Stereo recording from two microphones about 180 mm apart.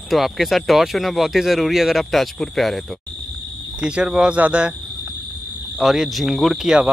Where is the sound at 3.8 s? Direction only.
5° right (ahead or behind).